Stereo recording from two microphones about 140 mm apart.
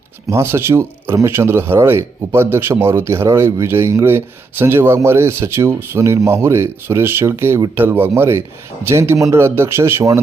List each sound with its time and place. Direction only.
0.3 s speech: 20° right (ahead or behind)